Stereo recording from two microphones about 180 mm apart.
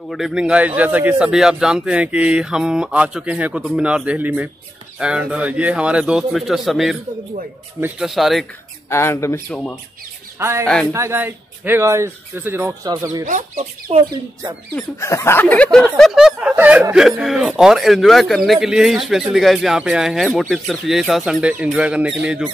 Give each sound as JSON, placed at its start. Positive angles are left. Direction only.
{"t": 0.1, "sound": "speech", "side_deg": -5}
{"t": 8.9, "sound": "speech", "side_deg": 15}
{"t": 9.5, "sound": "speech", "side_deg": 5}
{"t": 10.4, "sound": "speech", "side_deg": -15}
{"t": 13.2, "sound": "speech", "side_deg": -45}
{"t": 15.0, "sound": "speech", "side_deg": 15}